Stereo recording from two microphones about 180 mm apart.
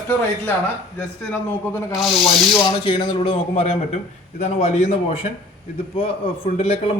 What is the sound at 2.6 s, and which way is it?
A man's voice, 25° left (ahead or behind).